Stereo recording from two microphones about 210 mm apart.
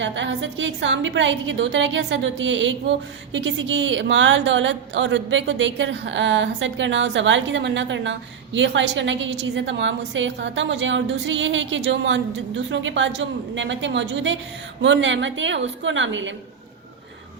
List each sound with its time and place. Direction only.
0.0 s a woman's voice: 60° right (ahead or behind)